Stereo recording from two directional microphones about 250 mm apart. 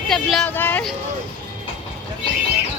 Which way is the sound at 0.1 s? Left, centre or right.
Centre.